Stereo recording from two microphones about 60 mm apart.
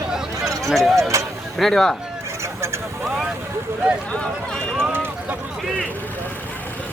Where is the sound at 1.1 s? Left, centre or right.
Right.